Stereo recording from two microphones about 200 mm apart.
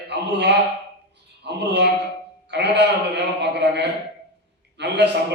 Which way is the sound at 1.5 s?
55° right (ahead or behind).